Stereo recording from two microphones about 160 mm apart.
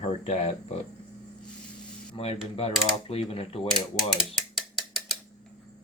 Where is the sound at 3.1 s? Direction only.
35° left (ahead or behind).